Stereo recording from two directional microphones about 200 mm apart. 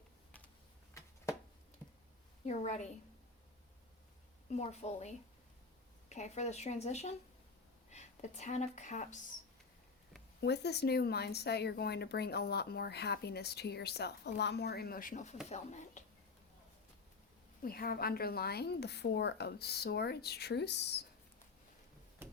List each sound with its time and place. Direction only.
0.3 s a sound: 10° left (ahead or behind)
2.5 s speech: 35° left (ahead or behind)
4.5 s speech: 35° left (ahead or behind)
10.4 s a woman's voice: 55° left (ahead or behind); by 16.0 s 35° left (ahead or behind)
17.6 s a woman's voice: 45° left (ahead or behind)